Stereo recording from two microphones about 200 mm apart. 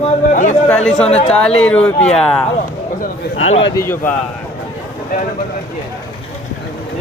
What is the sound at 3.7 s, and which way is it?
Speech, 10° left (ahead or behind).